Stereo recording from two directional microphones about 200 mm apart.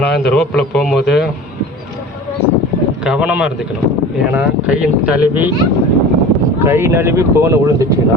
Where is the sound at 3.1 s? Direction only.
5° right (ahead or behind).